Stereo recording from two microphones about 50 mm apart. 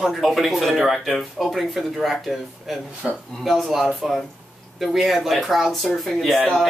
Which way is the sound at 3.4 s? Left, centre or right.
Centre.